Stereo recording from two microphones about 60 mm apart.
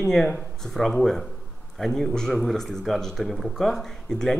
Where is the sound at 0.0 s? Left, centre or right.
Centre.